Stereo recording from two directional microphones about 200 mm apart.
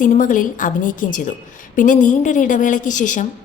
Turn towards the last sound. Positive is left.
turn(degrees=40)  # may be behind; listen again after turning